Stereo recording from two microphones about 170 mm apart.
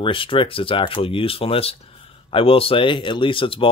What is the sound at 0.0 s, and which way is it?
Speech, 30° left (ahead or behind).